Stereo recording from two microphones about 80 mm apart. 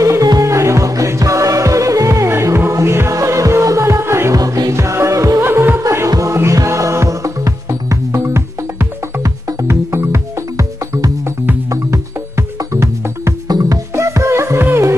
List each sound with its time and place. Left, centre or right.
0.0 s music: right
4.4 s music: right
4.7 s music: right
5.4 s music: right
11.7 s music: right
13.5 s music: right
13.9 s music: right